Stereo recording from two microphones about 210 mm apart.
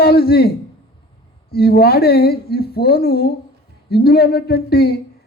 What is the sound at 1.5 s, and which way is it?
Speech, 50° left (ahead or behind).